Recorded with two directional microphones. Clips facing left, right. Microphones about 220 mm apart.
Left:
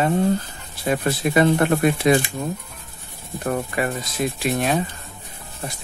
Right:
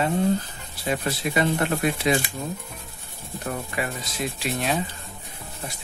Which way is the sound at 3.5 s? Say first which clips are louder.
Left 6 dB; 55° left (ahead or behind).